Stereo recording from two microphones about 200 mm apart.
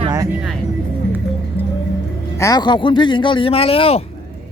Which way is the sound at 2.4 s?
20° left (ahead or behind).